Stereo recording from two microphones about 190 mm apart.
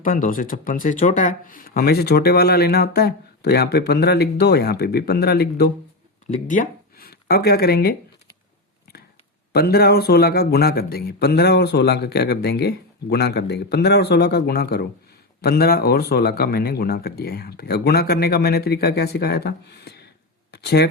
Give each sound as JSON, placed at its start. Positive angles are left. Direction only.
{"t": 0.0, "sound": "speech", "side_deg": 45}
{"t": 6.3, "sound": "speech", "side_deg": 45}
{"t": 9.5, "sound": "speech", "side_deg": 55}